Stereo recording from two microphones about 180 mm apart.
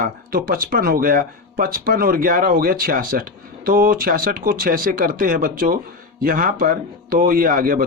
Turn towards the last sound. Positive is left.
turn(degrees=-50)  # may be behind; listen again after turning